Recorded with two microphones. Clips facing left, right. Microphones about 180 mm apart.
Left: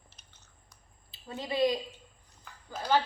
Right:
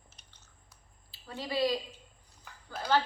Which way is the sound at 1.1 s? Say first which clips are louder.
Left 1 dB; 20° left (ahead or behind).